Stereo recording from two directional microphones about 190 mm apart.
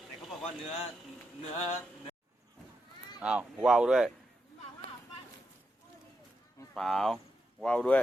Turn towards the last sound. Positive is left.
turn(degrees=5)  # may be behind; listen again after turning